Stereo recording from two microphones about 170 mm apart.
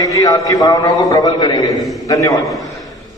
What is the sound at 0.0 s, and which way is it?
A man's voice, 20° left (ahead or behind).